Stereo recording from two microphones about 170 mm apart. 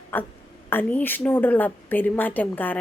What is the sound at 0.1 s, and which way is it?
A woman's voice, 15° left (ahead or behind).